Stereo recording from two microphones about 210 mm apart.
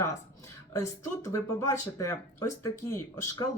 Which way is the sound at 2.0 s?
15° left (ahead or behind).